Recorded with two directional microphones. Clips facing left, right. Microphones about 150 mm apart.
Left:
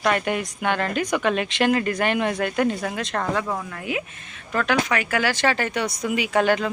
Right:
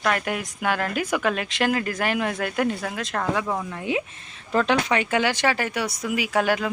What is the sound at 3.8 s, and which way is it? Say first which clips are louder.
Speech: right 2 dB; 25° right (ahead or behind).